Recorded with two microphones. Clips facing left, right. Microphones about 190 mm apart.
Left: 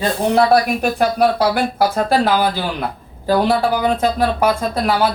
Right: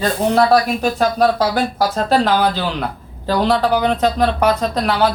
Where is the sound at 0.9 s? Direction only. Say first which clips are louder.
Even; 15° left (ahead or behind).